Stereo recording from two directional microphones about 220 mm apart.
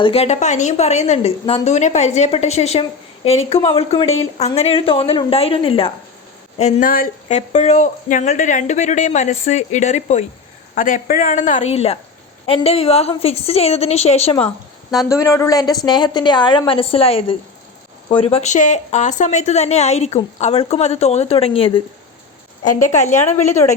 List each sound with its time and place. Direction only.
0.0 s a woman's voice: 25° left (ahead or behind)
14.3 s a woman's voice: 5° left (ahead or behind)
15.1 s a woman's voice: 15° left (ahead or behind); by 23.6 s 30° left (ahead or behind)